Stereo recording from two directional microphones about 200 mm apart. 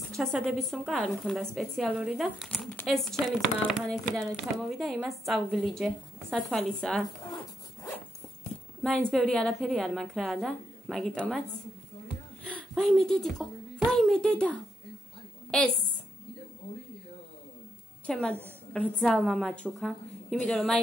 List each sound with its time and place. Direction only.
0.1 s speech: centre (ahead or behind)
7.2 s dog: 20° left (ahead or behind)
8.8 s speech: centre (ahead or behind)
12.4 s speech: centre (ahead or behind)
18.0 s a woman's voice: 5° left (ahead or behind)